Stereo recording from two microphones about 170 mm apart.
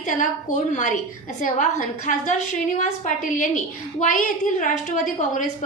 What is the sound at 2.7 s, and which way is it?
A woman's voice, 45° left (ahead or behind).